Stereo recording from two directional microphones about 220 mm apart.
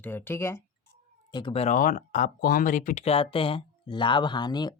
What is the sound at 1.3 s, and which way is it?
Speech, 25° left (ahead or behind).